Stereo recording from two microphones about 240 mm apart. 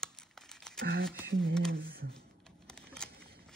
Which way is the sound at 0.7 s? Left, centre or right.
Right.